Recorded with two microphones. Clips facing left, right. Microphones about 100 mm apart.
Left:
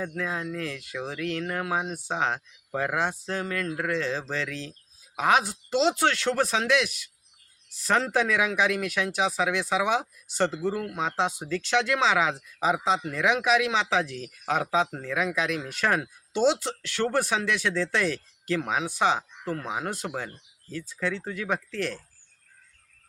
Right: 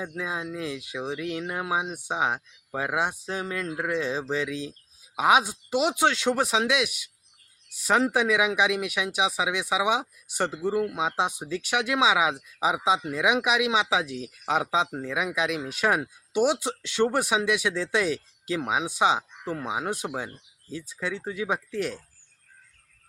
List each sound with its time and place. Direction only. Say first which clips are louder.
0.0 s speech: left 1 dB; 15° right (ahead or behind)